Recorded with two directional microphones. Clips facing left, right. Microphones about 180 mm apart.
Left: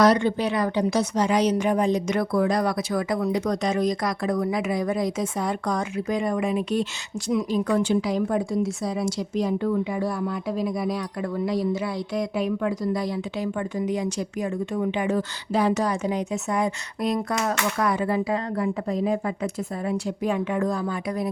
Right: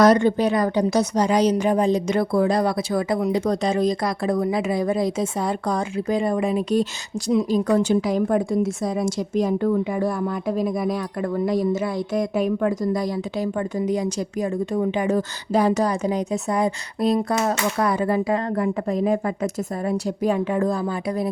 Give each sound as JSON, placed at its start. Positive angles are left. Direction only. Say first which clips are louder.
{"t": 0.0, "sound": "a woman's voice", "louder": "right 3 dB", "side_deg": -45}